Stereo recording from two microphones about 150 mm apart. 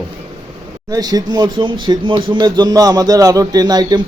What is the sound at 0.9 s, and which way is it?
Speech, 25° right (ahead or behind).